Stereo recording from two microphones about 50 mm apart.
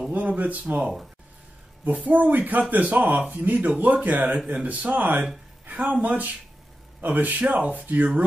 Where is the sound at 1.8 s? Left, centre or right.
Right.